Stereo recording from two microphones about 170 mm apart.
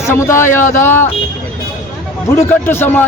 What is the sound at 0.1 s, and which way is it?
Speech, 15° left (ahead or behind).